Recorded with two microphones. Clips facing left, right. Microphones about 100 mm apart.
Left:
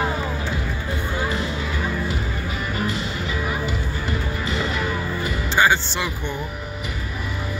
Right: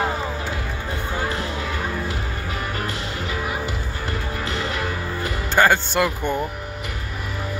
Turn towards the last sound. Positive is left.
turn(degrees=-50)  # may be behind; listen again after turning